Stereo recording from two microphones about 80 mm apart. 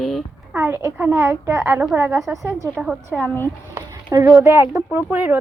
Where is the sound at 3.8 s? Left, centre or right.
Right.